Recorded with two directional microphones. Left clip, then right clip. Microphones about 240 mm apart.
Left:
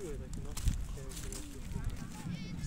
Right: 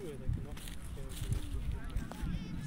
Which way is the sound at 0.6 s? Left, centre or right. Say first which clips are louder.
Left 2 dB; left.